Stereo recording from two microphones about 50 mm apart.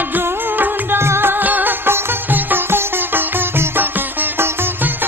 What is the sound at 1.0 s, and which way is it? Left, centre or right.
Music, right.